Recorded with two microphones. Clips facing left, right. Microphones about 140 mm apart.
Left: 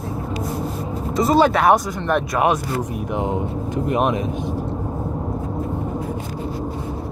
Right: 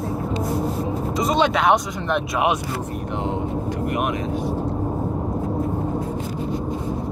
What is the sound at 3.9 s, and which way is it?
Speech, 25° left (ahead or behind).